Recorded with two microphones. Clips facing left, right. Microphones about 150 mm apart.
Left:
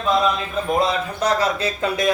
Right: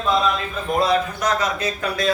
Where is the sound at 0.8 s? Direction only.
30° left (ahead or behind).